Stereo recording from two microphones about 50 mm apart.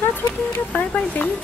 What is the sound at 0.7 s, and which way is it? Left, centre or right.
Speech, left.